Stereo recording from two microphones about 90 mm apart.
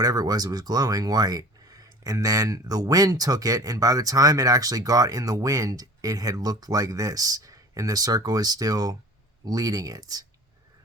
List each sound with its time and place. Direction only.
0.0 s speech: 40° right (ahead or behind)